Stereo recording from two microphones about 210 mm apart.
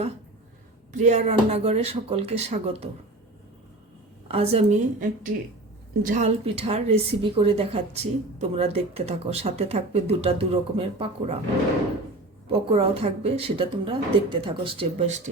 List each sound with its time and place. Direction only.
0.9 s speech: 35° right (ahead or behind)
4.3 s a woman's voice: 30° right (ahead or behind)
12.5 s a woman's voice: 25° right (ahead or behind)